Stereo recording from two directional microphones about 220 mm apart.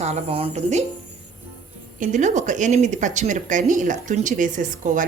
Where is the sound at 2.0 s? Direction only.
35° right (ahead or behind).